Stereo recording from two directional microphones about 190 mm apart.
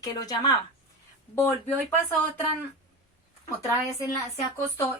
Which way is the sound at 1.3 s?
10° left (ahead or behind).